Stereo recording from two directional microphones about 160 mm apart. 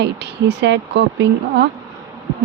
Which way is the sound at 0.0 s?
90° right.